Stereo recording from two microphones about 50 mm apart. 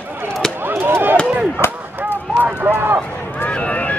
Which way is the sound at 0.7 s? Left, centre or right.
Right.